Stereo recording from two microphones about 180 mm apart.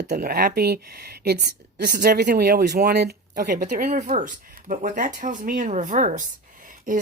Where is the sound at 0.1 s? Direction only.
50° right (ahead or behind).